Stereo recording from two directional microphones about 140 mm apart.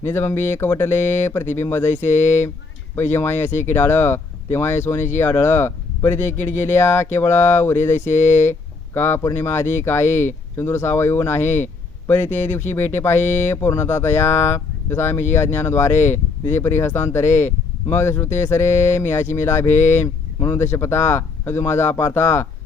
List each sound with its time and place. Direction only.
0.0 s speech: 15° left (ahead or behind)